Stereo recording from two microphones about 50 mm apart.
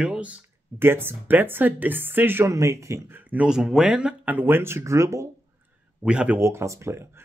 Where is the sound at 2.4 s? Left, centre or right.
Right.